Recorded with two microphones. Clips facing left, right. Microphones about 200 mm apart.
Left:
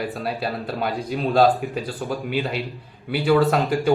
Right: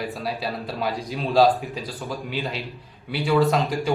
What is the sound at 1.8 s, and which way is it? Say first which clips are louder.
Speech: left 4 dB; 30° left (ahead or behind).